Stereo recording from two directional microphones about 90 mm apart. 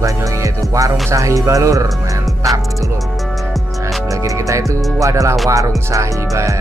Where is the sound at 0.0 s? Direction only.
35° right (ahead or behind).